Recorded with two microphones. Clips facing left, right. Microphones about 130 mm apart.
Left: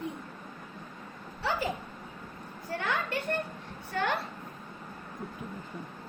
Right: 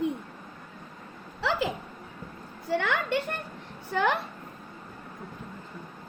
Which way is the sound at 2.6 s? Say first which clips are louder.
Right 5 dB; 85° right.